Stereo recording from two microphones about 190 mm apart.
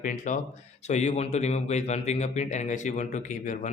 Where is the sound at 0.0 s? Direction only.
45° left (ahead or behind).